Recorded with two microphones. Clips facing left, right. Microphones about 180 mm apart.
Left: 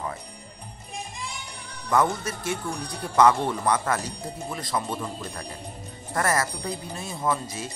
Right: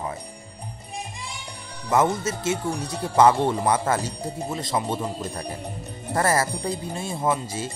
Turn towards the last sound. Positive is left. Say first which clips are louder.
# right 3 dB
turn(degrees=-30)  # may be behind; listen again after turning